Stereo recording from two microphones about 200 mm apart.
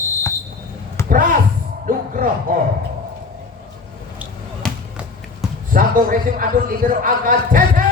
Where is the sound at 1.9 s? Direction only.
45° right (ahead or behind).